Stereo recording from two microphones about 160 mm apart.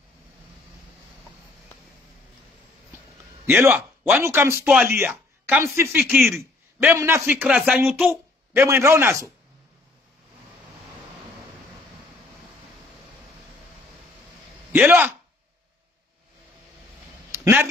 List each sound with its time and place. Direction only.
3.4 s speech: 10° right (ahead or behind)
6.8 s a man's voice: 15° right (ahead or behind)
14.7 s a man's voice: 10° right (ahead or behind)
17.3 s a sound: 10° right (ahead or behind)